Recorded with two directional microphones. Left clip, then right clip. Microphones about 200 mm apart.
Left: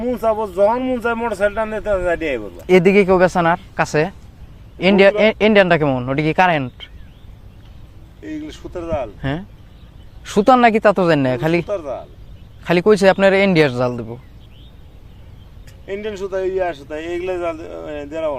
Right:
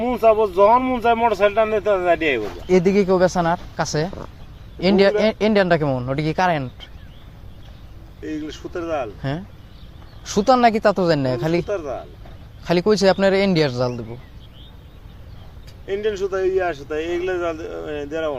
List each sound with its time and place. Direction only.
0.0 s speech: 5° left (ahead or behind)
2.6 s a man's voice: 55° left (ahead or behind)
8.2 s speech: 5° left (ahead or behind)
10.2 s a man's voice: 45° left (ahead or behind)
11.6 s speech: centre (ahead or behind)
12.6 s a man's voice: 45° left (ahead or behind)
15.9 s speech: centre (ahead or behind)